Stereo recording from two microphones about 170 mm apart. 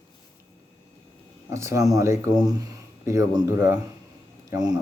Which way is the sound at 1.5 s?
15° right (ahead or behind).